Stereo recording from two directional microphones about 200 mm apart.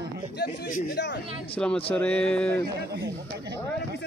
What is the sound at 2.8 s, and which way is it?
Speech, 55° right (ahead or behind).